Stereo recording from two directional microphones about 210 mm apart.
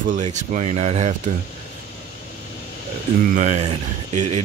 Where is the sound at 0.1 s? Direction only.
35° right (ahead or behind).